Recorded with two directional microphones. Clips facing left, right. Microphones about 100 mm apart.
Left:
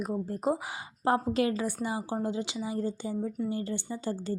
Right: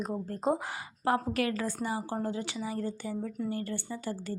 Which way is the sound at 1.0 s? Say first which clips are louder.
Left 2 dB; 25° left (ahead or behind).